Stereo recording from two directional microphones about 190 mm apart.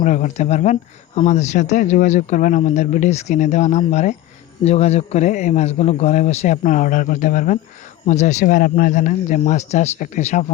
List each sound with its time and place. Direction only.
0.0 s a man's voice: 40° left (ahead or behind)